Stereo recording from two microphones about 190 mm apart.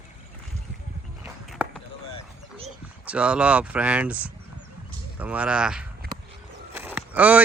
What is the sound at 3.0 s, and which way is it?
Speech, 5° right (ahead or behind).